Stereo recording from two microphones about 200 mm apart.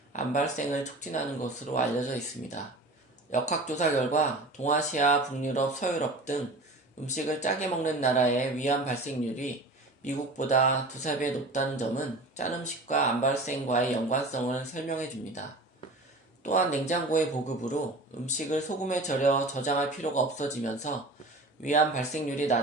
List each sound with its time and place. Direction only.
0.1 s speech: 35° left (ahead or behind)